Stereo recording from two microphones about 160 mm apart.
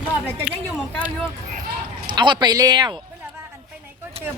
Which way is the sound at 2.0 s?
30° right (ahead or behind).